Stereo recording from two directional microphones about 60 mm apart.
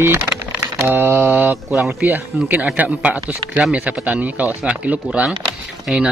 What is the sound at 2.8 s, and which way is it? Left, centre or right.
Speech, right.